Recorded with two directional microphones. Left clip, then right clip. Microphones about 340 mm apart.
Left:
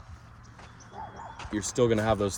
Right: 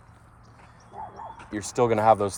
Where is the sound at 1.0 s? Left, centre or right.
Right.